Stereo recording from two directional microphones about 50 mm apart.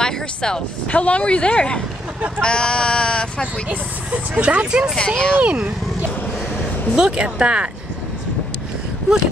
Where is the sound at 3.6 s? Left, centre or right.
Right.